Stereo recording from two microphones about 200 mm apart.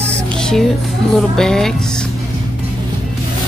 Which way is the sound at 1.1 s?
Centre (ahead or behind).